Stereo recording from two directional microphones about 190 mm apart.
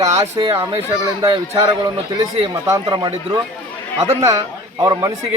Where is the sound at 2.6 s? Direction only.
20° right (ahead or behind).